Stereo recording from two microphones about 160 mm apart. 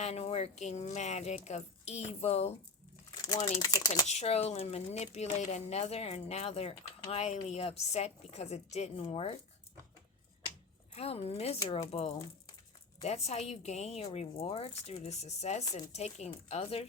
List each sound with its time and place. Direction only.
0.0 s speech: 40° left (ahead or behind)
3.6 s speech: 25° left (ahead or behind)
4.0 s speech: 45° left (ahead or behind)
10.9 s speech: 40° left (ahead or behind)